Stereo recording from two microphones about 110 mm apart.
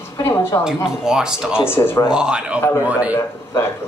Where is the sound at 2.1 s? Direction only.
10° right (ahead or behind).